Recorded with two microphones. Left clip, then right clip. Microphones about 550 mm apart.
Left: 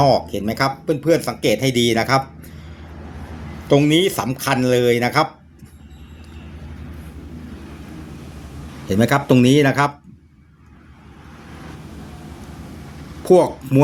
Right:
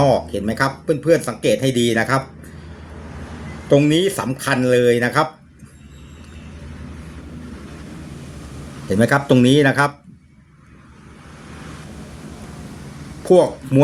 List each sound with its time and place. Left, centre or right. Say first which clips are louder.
0.0 s speech: left 1 dB; left
3.7 s speech: even; left
8.9 s speech: right 1 dB; left
13.2 s speech: even; left